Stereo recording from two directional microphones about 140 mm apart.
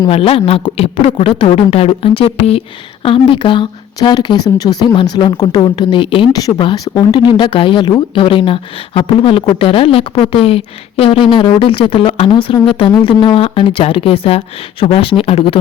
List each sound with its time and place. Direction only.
0.1 s speech: 40° left (ahead or behind)